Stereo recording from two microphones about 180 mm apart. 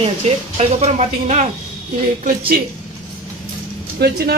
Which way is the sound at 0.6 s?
35° right (ahead or behind).